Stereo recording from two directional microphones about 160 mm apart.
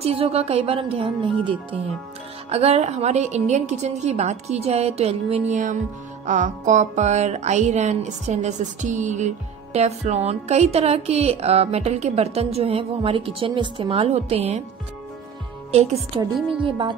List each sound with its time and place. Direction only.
0.0 s speech: 40° right (ahead or behind)
2.5 s music: 40° right (ahead or behind)
15.7 s speech: 40° right (ahead or behind)
16.6 s speech: 30° right (ahead or behind)